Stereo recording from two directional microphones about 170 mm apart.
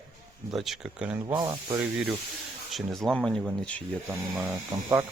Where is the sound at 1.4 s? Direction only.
20° right (ahead or behind).